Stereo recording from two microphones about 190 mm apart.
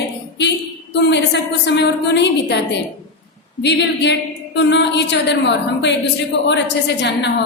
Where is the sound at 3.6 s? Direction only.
65° left (ahead or behind).